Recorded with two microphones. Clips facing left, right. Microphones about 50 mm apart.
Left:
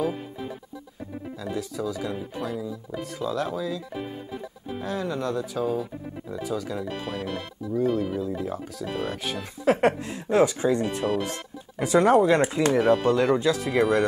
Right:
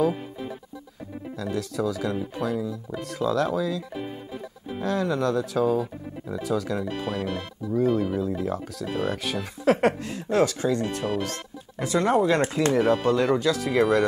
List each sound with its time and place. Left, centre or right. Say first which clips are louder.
0.0 s music: right 4 dB; centre
1.3 s speech: right 3 dB; centre
11.2 s music: even; centre
12.2 s speech: left 2 dB; centre